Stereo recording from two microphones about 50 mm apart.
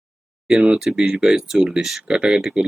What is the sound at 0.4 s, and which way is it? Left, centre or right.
Speech, centre.